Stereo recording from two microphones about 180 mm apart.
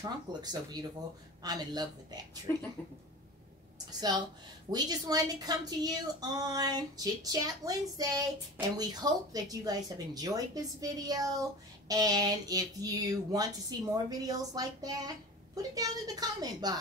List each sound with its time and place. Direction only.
0.0 s a woman's voice: 20° right (ahead or behind)
4.6 s a woman's voice: 20° right (ahead or behind)